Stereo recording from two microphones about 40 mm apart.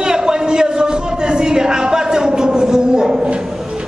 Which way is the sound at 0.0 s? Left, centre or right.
Centre.